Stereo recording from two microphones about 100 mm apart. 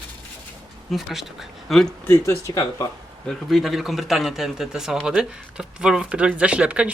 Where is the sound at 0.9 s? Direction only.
5° right (ahead or behind).